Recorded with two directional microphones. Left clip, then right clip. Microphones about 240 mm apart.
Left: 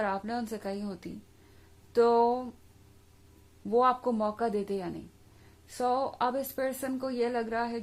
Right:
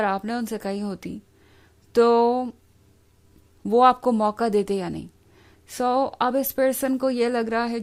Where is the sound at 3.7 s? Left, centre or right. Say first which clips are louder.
Right 9 dB; right.